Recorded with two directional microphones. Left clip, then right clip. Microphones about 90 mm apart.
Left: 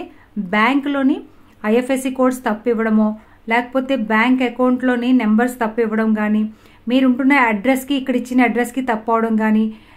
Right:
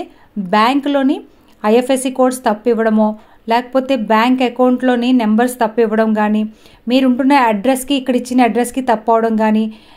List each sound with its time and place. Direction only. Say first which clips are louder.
0.5 s speech: right 4 dB; 40° right (ahead or behind)
3.4 s speech: right 3 dB; 45° right (ahead or behind)